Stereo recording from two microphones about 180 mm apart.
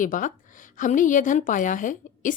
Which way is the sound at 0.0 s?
45° left (ahead or behind).